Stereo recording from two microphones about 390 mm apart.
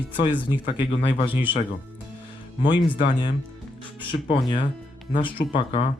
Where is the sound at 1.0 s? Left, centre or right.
Centre.